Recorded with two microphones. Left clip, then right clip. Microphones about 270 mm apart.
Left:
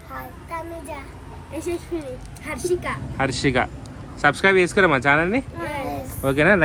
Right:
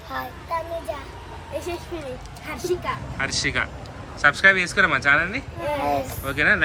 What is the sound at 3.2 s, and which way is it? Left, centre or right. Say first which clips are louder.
Speech: left 4 dB; centre.